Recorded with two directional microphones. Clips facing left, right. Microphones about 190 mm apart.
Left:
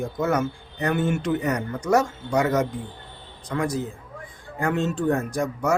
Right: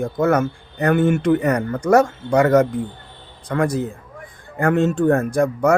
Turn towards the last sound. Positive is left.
turn(degrees=-60)  # may be behind; listen again after turning